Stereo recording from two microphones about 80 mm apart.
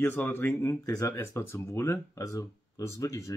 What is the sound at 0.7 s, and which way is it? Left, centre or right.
Speech, left.